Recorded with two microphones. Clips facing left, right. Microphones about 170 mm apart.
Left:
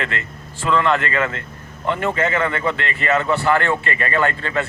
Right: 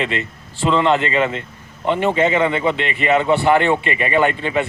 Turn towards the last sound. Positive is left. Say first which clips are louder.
# right 3 dB
turn(degrees=-15)  # may be behind; listen again after turning